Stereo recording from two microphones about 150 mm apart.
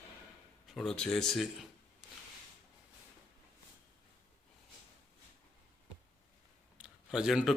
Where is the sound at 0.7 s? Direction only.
5° left (ahead or behind).